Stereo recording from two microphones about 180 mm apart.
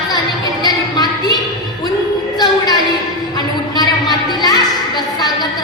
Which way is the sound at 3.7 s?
20° left (ahead or behind).